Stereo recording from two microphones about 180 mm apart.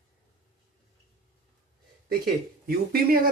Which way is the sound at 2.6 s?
55° right (ahead or behind).